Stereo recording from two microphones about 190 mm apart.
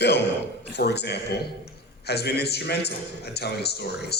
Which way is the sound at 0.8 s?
60° left (ahead or behind).